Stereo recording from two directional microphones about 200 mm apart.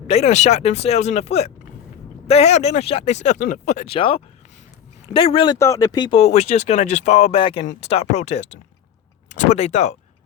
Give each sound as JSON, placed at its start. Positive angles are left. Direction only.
{"t": 0.1, "sound": "speech", "side_deg": 35}
{"t": 5.5, "sound": "speech", "side_deg": 15}